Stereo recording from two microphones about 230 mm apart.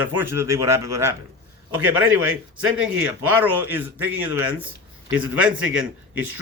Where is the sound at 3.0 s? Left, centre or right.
Centre.